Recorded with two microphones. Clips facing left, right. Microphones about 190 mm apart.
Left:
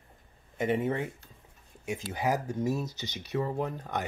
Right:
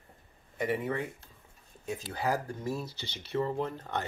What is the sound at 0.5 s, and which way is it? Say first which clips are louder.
Speech: left 3 dB; 20° left (ahead or behind).